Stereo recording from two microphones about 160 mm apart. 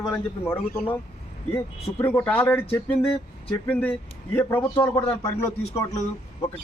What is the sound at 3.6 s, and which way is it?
A man's voice, 10° left (ahead or behind).